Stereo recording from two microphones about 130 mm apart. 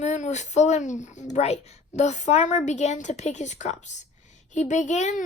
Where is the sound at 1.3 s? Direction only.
60° left (ahead or behind).